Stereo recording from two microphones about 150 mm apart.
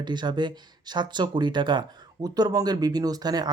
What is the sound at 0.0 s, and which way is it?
Speech, 30° right (ahead or behind).